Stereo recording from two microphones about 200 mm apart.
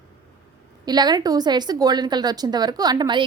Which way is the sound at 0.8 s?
20° right (ahead or behind).